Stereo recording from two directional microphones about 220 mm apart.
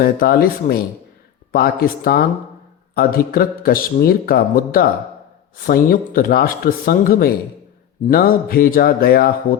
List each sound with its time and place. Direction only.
0.0 s speech: 40° left (ahead or behind)